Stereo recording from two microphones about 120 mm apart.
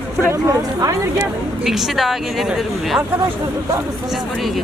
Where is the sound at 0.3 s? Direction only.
25° right (ahead or behind).